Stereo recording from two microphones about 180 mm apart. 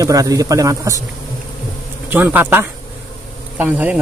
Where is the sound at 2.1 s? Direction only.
10° right (ahead or behind).